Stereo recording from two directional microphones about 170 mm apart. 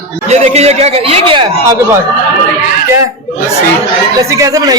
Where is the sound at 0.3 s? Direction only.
40° right (ahead or behind).